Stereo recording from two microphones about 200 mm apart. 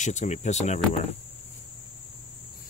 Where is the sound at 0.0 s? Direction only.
35° left (ahead or behind).